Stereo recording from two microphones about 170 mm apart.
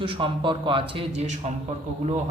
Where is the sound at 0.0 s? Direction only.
30° right (ahead or behind).